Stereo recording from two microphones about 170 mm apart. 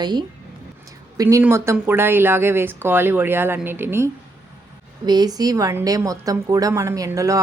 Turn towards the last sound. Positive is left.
turn(degrees=-20)  # may be behind; listen again after turning